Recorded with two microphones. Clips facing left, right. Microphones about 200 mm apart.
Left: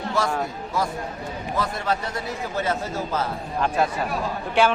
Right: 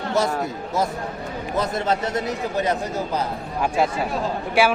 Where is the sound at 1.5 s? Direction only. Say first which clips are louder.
Right 3 dB; 20° right (ahead or behind).